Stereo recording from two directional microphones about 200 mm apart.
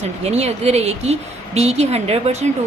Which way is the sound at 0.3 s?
30° right (ahead or behind).